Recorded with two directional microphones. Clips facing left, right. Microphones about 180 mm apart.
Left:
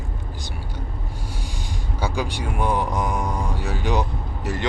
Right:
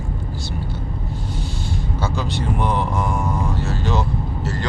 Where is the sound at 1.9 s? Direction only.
10° left (ahead or behind).